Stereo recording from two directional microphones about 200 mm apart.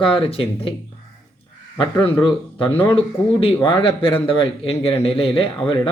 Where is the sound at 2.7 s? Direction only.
10° left (ahead or behind).